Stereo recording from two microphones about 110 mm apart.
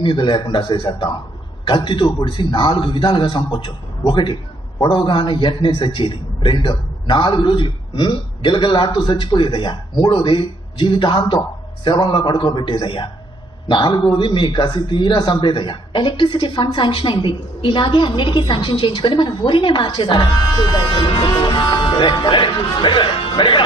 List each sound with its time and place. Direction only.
0.0 s a man's voice: 45° left (ahead or behind)